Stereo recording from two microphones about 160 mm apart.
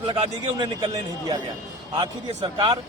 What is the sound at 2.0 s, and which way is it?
Speech, 30° right (ahead or behind).